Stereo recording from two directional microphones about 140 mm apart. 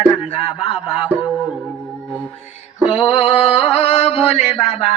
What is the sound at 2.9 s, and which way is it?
Music, 45° left (ahead or behind).